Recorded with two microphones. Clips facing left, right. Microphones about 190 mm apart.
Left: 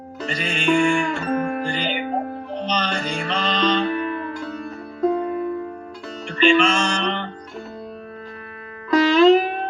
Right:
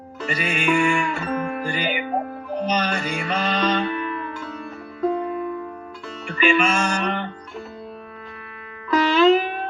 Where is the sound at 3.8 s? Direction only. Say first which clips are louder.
Left 3 dB; 35° left (ahead or behind).